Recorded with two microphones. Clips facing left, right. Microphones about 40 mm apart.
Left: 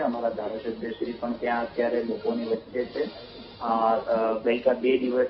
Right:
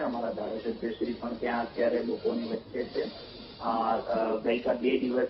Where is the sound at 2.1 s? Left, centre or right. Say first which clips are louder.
Left 2 dB; centre.